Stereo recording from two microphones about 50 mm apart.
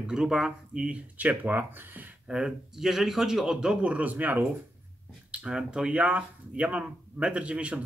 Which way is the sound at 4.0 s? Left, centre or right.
Right.